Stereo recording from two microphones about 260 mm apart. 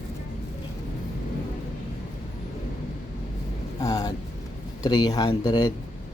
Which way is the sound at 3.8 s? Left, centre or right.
Centre.